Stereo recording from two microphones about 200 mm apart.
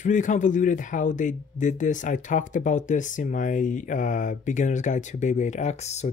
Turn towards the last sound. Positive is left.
turn(degrees=35)  # may be behind; listen again after turning